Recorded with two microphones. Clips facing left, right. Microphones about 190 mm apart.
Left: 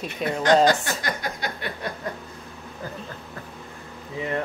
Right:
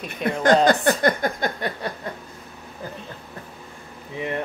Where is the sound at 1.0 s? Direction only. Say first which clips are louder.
Right 8 dB; 50° right (ahead or behind).